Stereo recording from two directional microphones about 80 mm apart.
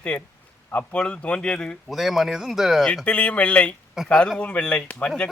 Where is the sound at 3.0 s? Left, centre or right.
Centre.